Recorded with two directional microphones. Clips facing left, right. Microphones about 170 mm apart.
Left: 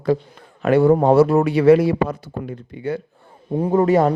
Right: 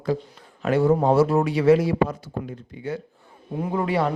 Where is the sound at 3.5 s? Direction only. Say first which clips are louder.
Left 8 dB; 40° left (ahead or behind).